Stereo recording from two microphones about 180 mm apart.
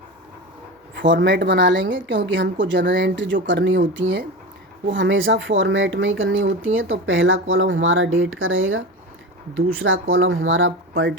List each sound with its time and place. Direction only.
0.9 s a woman's voice: 80° right